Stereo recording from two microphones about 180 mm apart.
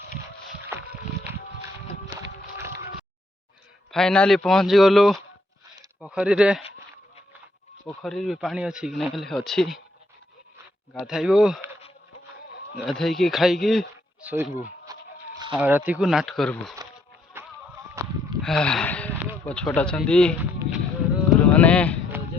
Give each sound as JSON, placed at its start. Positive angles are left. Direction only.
{"t": 0.7, "sound": "music", "side_deg": -15}
{"t": 3.9, "sound": "a man's voice", "side_deg": 5}
{"t": 7.9, "sound": "a man's voice", "side_deg": 0}
{"t": 10.9, "sound": "a man's voice", "side_deg": 0}
{"t": 12.8, "sound": "a man's voice", "side_deg": 0}
{"t": 17.3, "sound": "music", "side_deg": -15}
{"t": 18.0, "sound": "a sound", "side_deg": -15}
{"t": 18.4, "sound": "a man's voice", "side_deg": 5}
{"t": 20.4, "sound": "a sound", "side_deg": -5}
{"t": 21.4, "sound": "speech", "side_deg": 10}